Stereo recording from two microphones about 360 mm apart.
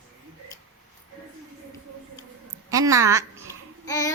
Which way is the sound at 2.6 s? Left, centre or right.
Centre.